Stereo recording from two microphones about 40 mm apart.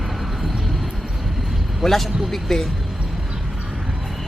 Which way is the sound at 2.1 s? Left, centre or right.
Centre.